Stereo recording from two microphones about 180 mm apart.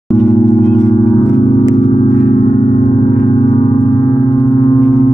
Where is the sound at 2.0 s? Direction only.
35° left (ahead or behind).